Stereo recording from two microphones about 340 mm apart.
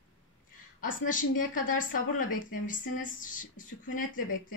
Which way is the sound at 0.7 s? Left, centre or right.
Left.